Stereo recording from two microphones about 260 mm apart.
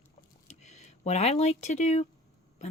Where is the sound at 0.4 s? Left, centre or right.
Left.